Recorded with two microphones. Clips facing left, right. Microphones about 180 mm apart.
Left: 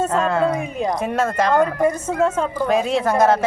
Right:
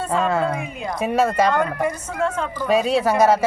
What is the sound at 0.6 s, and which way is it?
Speech, 40° left (ahead or behind).